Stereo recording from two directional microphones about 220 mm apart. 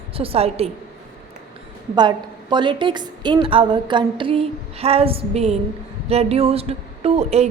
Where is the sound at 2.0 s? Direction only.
20° right (ahead or behind).